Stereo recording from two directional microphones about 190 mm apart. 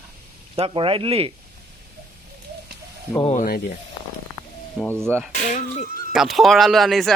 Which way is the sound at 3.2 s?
40° left (ahead or behind).